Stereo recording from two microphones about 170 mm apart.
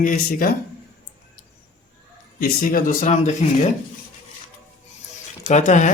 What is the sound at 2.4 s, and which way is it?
Speech, 55° left (ahead or behind).